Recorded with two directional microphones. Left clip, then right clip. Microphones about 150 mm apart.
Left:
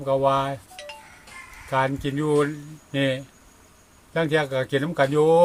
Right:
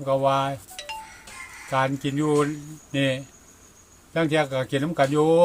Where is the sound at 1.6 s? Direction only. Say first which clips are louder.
Left 1 dB; 25° left (ahead or behind).